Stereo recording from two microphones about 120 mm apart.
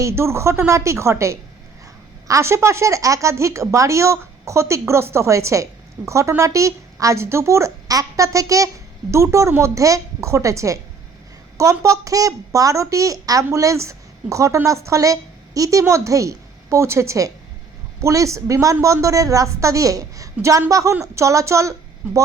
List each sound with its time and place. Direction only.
0.0 s a woman's voice: 20° right (ahead or behind)